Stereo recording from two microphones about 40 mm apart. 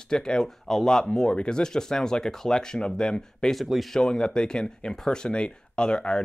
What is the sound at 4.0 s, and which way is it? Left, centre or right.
Speech, centre.